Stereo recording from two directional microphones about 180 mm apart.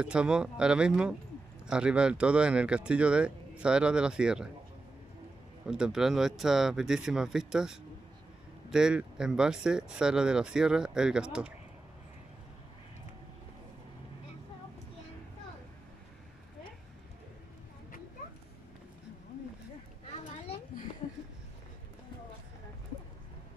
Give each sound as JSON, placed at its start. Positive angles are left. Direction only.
{"t": 0.0, "sound": "speech", "side_deg": -5}
{"t": 5.7, "sound": "speech", "side_deg": -5}
{"t": 20.2, "sound": "a sound", "side_deg": 35}